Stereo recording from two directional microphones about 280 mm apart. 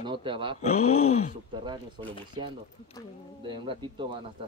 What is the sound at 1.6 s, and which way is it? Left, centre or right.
Speech, centre.